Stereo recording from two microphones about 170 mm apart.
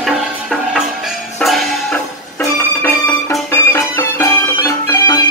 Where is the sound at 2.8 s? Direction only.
15° left (ahead or behind).